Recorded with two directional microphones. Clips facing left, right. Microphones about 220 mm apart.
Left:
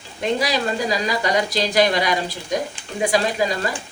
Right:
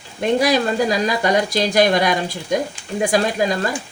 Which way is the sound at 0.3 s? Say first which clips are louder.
Right 7 dB; 50° right (ahead or behind).